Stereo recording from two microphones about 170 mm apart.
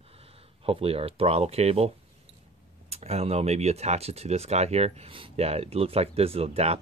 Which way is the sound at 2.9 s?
40° right (ahead or behind).